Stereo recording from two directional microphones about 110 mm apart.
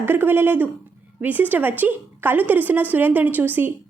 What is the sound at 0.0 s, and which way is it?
A woman's voice, 20° right (ahead or behind).